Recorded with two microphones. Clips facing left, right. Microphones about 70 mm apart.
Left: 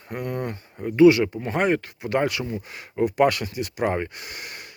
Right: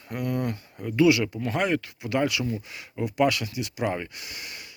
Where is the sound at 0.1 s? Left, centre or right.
Left.